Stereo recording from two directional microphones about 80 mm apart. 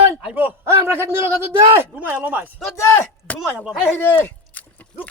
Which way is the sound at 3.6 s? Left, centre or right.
Centre.